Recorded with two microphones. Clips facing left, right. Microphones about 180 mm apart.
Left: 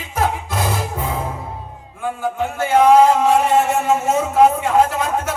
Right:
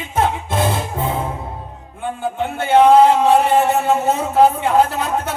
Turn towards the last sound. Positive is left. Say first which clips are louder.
# even
turn(degrees=-30)  # may be behind; listen again after turning